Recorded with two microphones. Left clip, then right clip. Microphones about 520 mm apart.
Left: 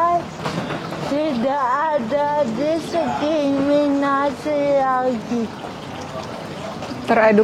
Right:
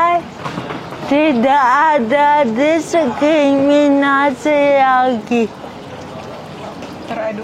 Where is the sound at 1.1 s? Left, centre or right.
Right.